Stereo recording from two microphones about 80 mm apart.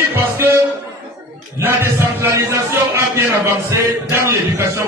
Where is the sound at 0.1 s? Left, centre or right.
Right.